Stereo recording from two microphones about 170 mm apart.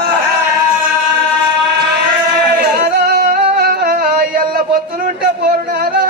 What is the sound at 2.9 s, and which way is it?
Music, 70° right (ahead or behind).